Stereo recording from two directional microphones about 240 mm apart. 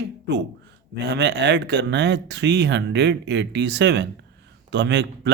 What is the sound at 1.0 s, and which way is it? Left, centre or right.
Speech, right.